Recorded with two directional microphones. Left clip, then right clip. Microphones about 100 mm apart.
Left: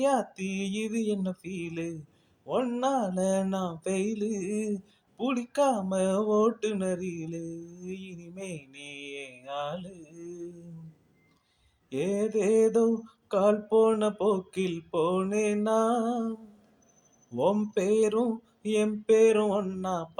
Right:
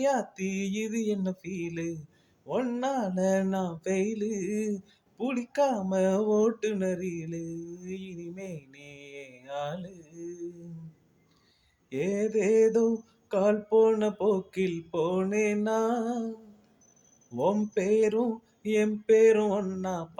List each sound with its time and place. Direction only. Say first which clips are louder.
0.0 s mantra: left 1 dB; 20° left (ahead or behind)
11.9 s mantra: even; 20° left (ahead or behind)
17.3 s mantra: left 1 dB; 20° left (ahead or behind)